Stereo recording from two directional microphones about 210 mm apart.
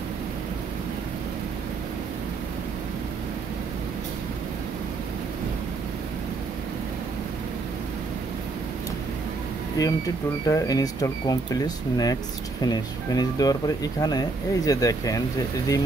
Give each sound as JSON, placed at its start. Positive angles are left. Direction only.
{"t": 9.8, "sound": "speech", "side_deg": 15}